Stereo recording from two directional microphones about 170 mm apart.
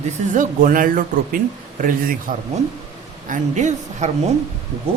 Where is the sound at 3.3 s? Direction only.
45° right (ahead or behind).